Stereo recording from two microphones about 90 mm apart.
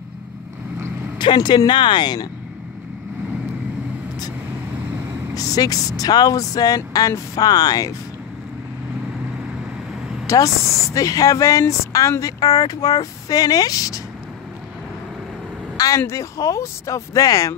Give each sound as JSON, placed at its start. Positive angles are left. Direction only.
{"t": 1.1, "sound": "speech", "side_deg": 60}
{"t": 5.3, "sound": "speech", "side_deg": 40}
{"t": 10.2, "sound": "speech", "side_deg": 35}
{"t": 16.0, "sound": "speech", "side_deg": 35}